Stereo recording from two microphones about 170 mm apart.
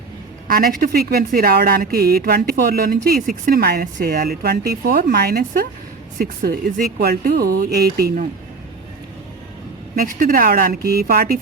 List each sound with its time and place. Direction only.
0.4 s speech: 55° right (ahead or behind)
9.9 s speech: 55° right (ahead or behind)